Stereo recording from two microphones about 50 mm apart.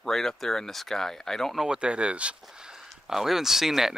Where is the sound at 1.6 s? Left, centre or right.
Centre.